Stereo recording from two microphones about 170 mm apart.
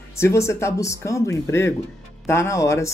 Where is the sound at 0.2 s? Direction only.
15° left (ahead or behind).